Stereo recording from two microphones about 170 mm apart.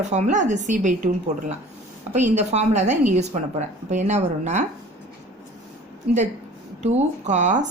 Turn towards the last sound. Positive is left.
turn(degrees=-45)  # may be behind; listen again after turning